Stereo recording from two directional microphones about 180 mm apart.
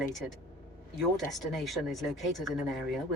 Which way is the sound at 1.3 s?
Centre (ahead or behind).